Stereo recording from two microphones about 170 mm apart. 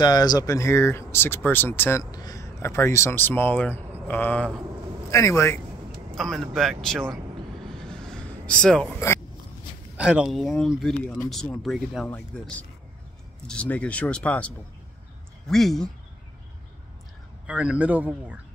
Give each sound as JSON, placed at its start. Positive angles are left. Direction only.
{"t": 0.0, "sound": "speech", "side_deg": 25}
{"t": 6.1, "sound": "speech", "side_deg": 0}
{"t": 7.6, "sound": "vehicle", "side_deg": 5}
{"t": 9.9, "sound": "speech", "side_deg": -5}
{"t": 17.5, "sound": "speech", "side_deg": -5}